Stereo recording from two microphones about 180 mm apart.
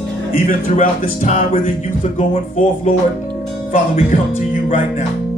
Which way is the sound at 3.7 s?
45° left (ahead or behind).